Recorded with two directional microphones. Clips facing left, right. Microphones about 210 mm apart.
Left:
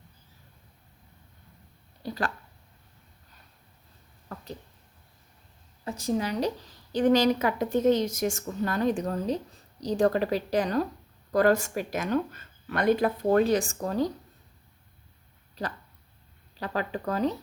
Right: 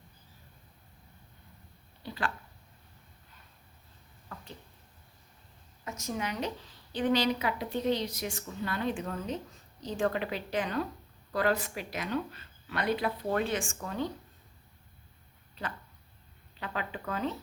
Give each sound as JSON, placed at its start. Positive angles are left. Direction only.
{"t": 2.0, "sound": "a woman's voice", "side_deg": 40}
{"t": 4.3, "sound": "a sound", "side_deg": 40}
{"t": 5.8, "sound": "a woman's voice", "side_deg": 30}
{"t": 15.6, "sound": "a woman's voice", "side_deg": 40}